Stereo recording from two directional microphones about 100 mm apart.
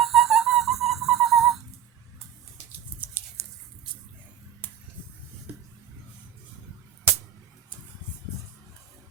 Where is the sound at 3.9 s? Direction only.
55° right (ahead or behind).